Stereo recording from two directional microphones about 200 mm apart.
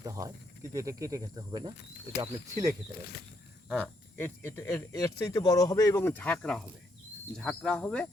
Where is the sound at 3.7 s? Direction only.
5° left (ahead or behind).